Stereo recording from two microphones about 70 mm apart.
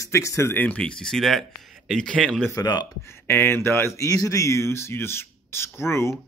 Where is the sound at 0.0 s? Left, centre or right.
Left.